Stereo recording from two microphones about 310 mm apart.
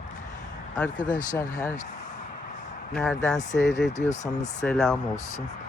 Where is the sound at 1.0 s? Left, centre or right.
Left.